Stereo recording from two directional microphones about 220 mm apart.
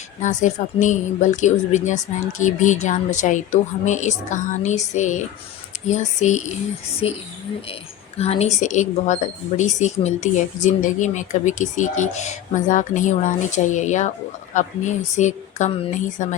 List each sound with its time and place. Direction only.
0.2 s speech: 35° left (ahead or behind)
8.2 s speech: 30° left (ahead or behind)